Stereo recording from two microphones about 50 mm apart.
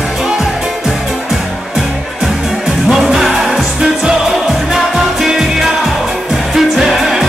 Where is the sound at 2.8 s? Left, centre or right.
Centre.